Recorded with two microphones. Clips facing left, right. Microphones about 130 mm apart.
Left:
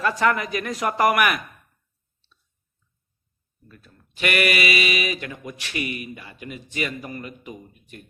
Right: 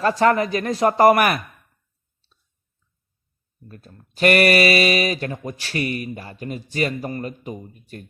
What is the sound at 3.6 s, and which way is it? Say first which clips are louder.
Speech: right 6 dB; 40° right (ahead or behind).